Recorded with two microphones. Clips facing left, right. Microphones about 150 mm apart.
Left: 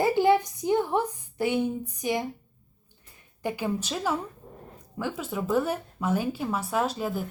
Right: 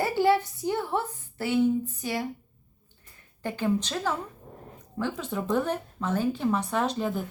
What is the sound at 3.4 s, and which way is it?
Speech, 10° left (ahead or behind).